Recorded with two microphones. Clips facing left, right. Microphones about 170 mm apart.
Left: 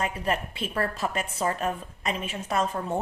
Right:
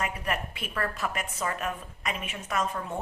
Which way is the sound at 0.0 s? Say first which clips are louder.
Left 3 dB; 30° left (ahead or behind).